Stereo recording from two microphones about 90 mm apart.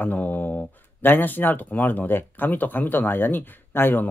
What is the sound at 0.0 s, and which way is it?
Speech, 20° left (ahead or behind).